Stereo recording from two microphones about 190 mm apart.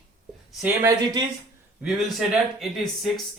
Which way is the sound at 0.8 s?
20° right (ahead or behind).